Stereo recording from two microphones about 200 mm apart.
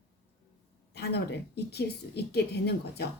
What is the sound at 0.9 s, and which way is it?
Speech, 55° left (ahead or behind).